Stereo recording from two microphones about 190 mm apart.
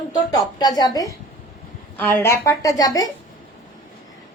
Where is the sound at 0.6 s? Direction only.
20° left (ahead or behind).